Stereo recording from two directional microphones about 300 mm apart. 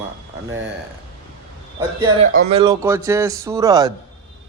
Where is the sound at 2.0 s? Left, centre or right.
Right.